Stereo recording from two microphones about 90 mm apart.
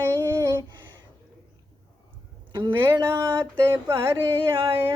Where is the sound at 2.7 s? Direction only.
25° right (ahead or behind).